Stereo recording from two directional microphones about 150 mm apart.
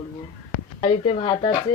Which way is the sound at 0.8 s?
40° left (ahead or behind).